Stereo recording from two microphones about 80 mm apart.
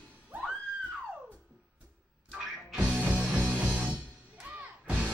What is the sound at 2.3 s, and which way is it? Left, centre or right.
Music, centre.